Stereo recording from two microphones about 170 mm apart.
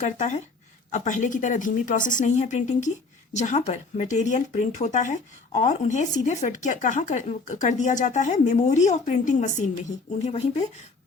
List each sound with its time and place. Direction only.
0.0 s speech: 45° left (ahead or behind)